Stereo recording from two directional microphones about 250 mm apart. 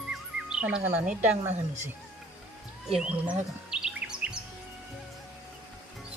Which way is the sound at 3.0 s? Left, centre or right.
Centre.